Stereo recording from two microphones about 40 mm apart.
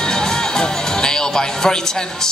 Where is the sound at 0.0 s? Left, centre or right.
Centre.